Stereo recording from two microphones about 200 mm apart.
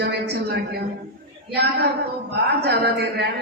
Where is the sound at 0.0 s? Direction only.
55° right (ahead or behind).